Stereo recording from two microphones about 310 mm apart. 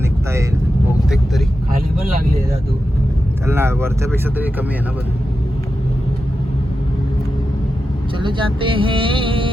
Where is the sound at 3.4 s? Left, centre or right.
Centre.